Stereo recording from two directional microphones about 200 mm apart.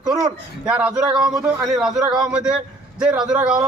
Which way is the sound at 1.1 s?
20° right (ahead or behind).